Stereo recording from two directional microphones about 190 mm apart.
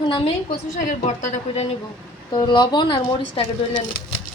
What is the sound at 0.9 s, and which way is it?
Speech, 45° left (ahead or behind).